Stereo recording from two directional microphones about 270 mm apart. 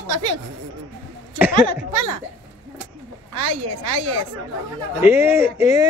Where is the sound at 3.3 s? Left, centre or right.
Right.